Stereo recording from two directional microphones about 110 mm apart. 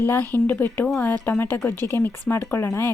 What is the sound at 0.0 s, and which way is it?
A woman's voice, 20° left (ahead or behind).